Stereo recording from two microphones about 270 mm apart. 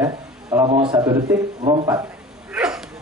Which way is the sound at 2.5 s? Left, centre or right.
Centre.